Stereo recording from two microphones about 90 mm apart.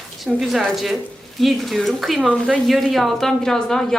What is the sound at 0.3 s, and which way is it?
Speech, centre (ahead or behind).